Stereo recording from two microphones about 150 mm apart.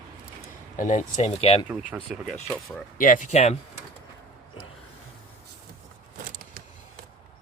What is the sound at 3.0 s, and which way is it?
Speech, 60° left (ahead or behind).